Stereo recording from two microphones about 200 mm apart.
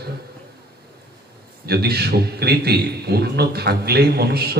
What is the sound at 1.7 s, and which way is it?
A man's voice, 50° right (ahead or behind).